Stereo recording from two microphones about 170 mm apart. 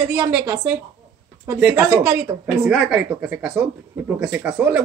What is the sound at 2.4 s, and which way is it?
A woman's voice, 5° right (ahead or behind).